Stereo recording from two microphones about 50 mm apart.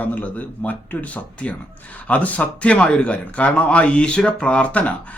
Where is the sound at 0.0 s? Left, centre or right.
Left.